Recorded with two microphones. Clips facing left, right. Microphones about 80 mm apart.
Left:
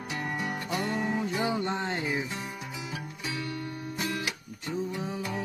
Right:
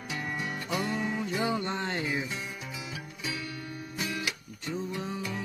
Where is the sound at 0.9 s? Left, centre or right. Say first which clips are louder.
Left 2 dB; left.